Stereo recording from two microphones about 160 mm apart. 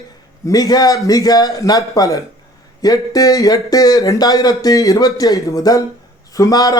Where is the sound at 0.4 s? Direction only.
20° left (ahead or behind).